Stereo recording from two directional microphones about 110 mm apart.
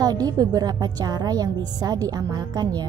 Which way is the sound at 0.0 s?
35° right (ahead or behind).